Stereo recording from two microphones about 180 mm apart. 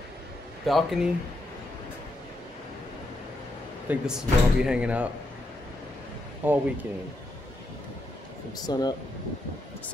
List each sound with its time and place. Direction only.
0.7 s speech: centre (ahead or behind)
3.9 s speech: 5° right (ahead or behind)
6.4 s speech: 10° right (ahead or behind)
8.5 s speech: 20° left (ahead or behind)